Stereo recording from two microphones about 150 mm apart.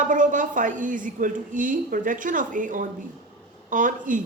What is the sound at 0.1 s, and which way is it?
A woman's voice, 60° right (ahead or behind).